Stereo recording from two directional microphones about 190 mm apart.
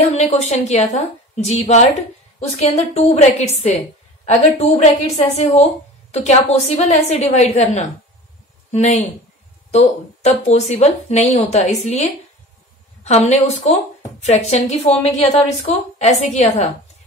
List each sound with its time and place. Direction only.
0.0 s a woman's voice: 35° left (ahead or behind)
10.2 s a woman's voice: 35° left (ahead or behind)